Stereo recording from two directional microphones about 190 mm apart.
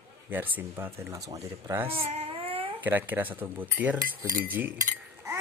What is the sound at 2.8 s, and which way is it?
Speech, 10° right (ahead or behind).